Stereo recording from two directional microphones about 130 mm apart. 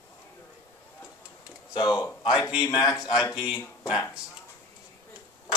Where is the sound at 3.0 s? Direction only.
5° right (ahead or behind).